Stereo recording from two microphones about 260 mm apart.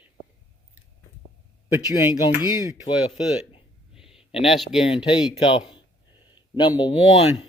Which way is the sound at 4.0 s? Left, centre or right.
Centre.